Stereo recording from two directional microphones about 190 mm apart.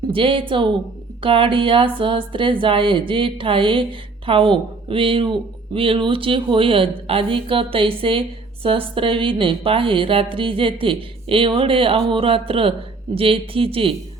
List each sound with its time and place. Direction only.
0.1 s a woman's voice: 25° right (ahead or behind)